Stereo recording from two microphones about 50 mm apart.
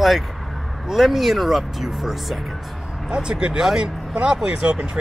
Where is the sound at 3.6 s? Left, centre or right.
Centre.